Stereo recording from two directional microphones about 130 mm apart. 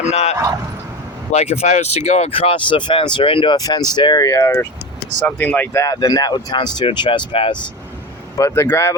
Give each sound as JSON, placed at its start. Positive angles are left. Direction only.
{"t": 0.0, "sound": "speech", "side_deg": 55}
{"t": 5.8, "sound": "speech", "side_deg": 25}
{"t": 8.4, "sound": "speech", "side_deg": 20}